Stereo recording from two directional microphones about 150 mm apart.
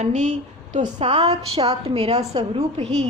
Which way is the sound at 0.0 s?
55° right (ahead or behind).